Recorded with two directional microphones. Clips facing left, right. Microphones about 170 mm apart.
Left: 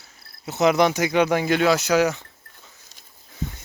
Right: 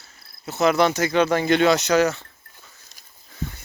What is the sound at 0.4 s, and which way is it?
Speech, 15° left (ahead or behind).